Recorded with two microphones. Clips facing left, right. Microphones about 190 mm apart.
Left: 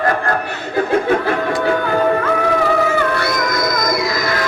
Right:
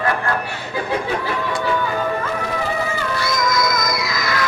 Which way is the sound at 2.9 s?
60° left (ahead or behind).